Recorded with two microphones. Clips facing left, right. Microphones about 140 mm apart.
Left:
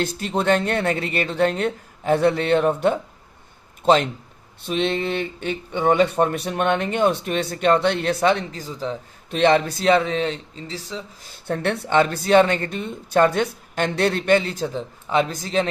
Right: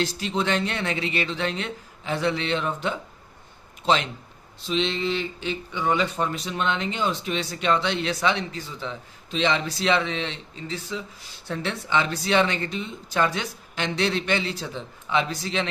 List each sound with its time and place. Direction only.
0.0 s a man's voice: 50° left (ahead or behind)
9.3 s a man's voice: 50° left (ahead or behind)